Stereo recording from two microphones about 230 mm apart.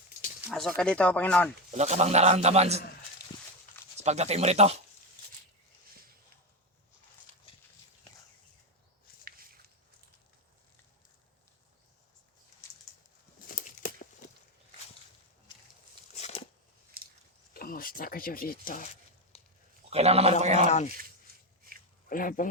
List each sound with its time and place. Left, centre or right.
0.4 s speech: centre
1.7 s a man's voice: right
3.9 s a man's voice: right
13.6 s crumpling: left
16.1 s a sound: left
17.0 s biting: right
17.5 s a sound: left
19.3 s a sound: left
19.9 s a man's voice: right
20.7 s speech: left
22.1 s speech: left